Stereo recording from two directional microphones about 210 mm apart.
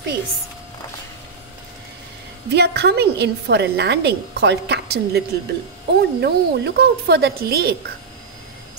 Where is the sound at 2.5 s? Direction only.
50° right (ahead or behind).